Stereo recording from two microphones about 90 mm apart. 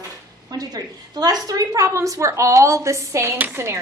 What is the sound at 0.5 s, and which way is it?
A woman's voice, 45° right (ahead or behind).